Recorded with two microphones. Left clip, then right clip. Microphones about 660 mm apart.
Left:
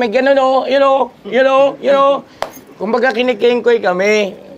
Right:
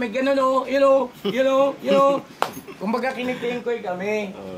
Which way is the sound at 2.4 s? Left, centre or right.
Centre.